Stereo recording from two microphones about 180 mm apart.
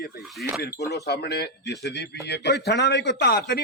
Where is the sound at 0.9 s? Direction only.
65° left (ahead or behind).